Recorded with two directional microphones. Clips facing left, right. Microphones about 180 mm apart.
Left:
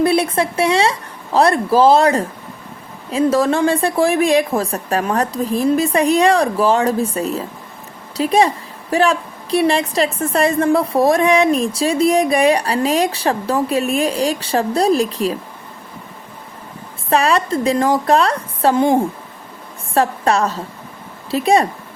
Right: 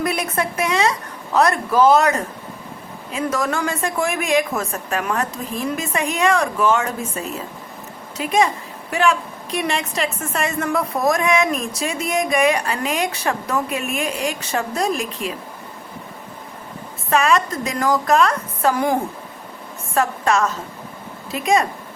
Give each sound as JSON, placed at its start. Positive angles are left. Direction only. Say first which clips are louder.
{"t": 0.0, "sound": "a woman's voice", "louder": "left 7 dB", "side_deg": 30}
{"t": 17.1, "sound": "a woman's voice", "louder": "left 2 dB", "side_deg": 35}